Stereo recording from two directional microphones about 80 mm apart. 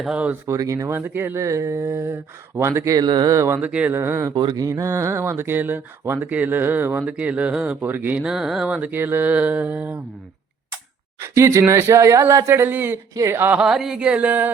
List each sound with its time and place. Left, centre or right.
0.4 s speech: right
0.9 s speech: right
1.4 s speech: right
3.0 s speech: right
3.2 s speech: right
3.6 s speech: centre
3.9 s speech: right
4.5 s speech: right
8.2 s speech: centre
8.6 s speech: centre
11.2 s speech: right
13.1 s speech: right
13.6 s speech: centre